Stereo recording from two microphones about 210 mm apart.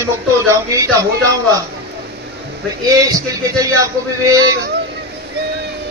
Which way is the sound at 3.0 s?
15° right (ahead or behind).